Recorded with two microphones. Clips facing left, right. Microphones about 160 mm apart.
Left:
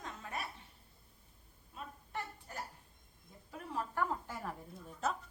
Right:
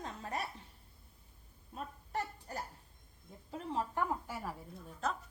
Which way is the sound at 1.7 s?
40° right (ahead or behind).